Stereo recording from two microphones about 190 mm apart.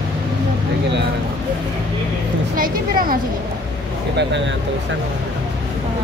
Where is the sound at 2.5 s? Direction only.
50° right (ahead or behind).